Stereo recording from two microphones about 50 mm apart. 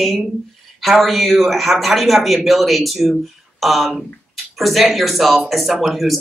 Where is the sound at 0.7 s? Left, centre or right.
Centre.